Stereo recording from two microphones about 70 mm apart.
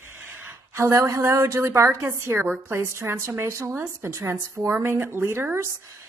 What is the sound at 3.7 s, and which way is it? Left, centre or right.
A woman's voice, right.